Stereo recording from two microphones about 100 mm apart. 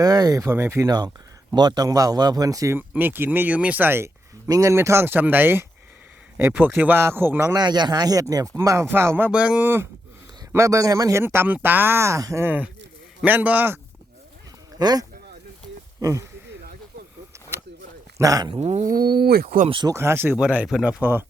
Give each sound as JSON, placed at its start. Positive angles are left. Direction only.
{"t": 0.0, "sound": "speech", "side_deg": -40}
{"t": 0.5, "sound": "speech", "side_deg": -25}
{"t": 0.9, "sound": "speech", "side_deg": -45}
{"t": 2.7, "sound": "speech", "side_deg": -20}
{"t": 4.4, "sound": "speech", "side_deg": -35}
{"t": 7.5, "sound": "speech", "side_deg": -45}
{"t": 10.5, "sound": "speech", "side_deg": -30}
{"t": 12.5, "sound": "speech", "side_deg": -15}
{"t": 14.8, "sound": "speech", "side_deg": -40}
{"t": 18.2, "sound": "speech", "side_deg": -35}
{"t": 19.9, "sound": "speech", "side_deg": -25}
{"t": 20.3, "sound": "speech", "side_deg": -15}
{"t": 21.0, "sound": "speech", "side_deg": -20}